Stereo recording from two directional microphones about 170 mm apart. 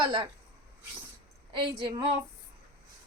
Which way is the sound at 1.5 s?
30° right (ahead or behind).